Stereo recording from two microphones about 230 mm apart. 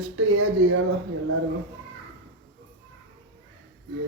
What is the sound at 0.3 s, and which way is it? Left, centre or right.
Speech, right.